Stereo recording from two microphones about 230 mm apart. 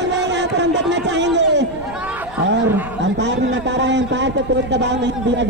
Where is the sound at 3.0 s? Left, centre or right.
Right.